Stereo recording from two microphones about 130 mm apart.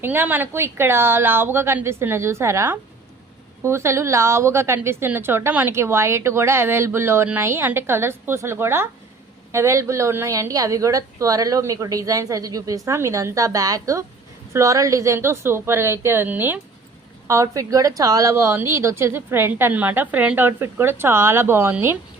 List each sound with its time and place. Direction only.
0.0 s a woman's voice: 15° right (ahead or behind)